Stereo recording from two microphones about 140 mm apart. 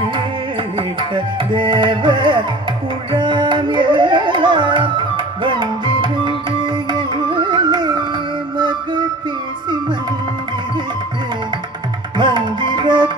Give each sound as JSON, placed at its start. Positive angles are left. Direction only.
{"t": 0.7, "sound": "music", "side_deg": -35}
{"t": 3.1, "sound": "carnatic music", "side_deg": -35}
{"t": 8.5, "sound": "music", "side_deg": -35}
{"t": 12.2, "sound": "music", "side_deg": -35}